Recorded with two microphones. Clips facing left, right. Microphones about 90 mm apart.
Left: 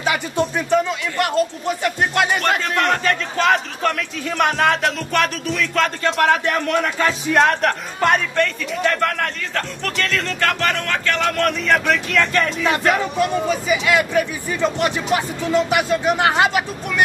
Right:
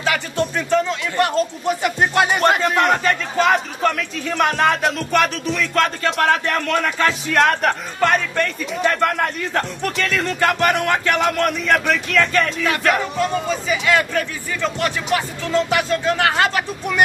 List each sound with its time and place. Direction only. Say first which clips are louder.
0.0 s a man's voice: left 1 dB; 15° left (ahead or behind)
1.8 s a man's voice: right 1 dB; 5° right (ahead or behind)
12.6 s a man's voice: left 1 dB; 20° left (ahead or behind)